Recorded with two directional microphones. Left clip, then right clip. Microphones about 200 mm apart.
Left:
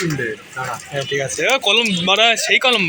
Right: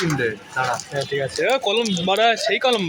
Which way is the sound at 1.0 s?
5° right (ahead or behind).